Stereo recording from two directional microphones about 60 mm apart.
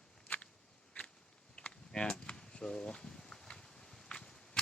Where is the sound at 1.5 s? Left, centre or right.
Centre.